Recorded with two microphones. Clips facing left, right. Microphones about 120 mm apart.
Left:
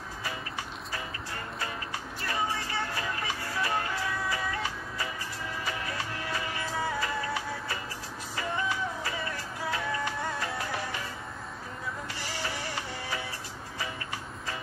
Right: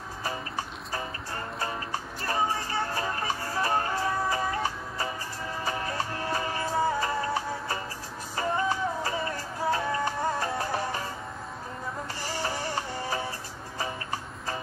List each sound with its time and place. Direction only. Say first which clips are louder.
0.2 s music: right 5 dB; 40° right (ahead or behind)
12.2 s music: right 6 dB; 40° right (ahead or behind)